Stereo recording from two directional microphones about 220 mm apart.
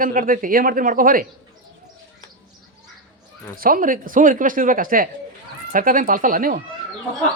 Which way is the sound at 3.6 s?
40° right (ahead or behind).